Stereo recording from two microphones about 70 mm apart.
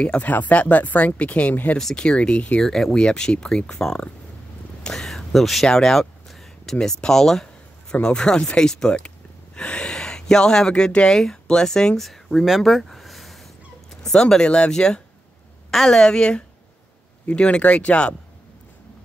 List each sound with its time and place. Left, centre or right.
0.0 s speech: centre
1.8 s speech: centre
2.6 s speech: centre